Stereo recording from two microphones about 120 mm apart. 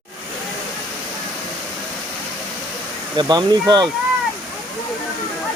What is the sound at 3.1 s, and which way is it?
Speech, 35° right (ahead or behind).